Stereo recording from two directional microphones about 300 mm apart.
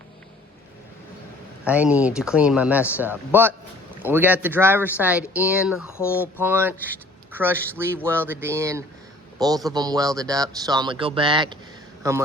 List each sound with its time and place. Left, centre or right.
1.6 s speech: centre
6.0 s speech: centre
6.4 s speech: centre